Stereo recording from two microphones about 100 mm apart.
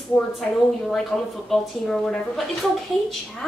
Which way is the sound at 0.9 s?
5° left (ahead or behind).